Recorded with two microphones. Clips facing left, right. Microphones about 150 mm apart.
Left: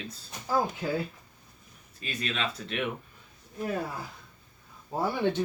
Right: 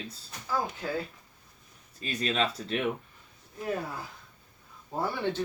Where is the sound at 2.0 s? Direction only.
35° right (ahead or behind).